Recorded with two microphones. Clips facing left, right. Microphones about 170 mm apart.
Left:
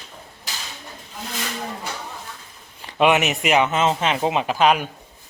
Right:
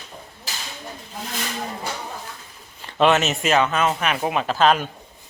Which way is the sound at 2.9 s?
15° left (ahead or behind).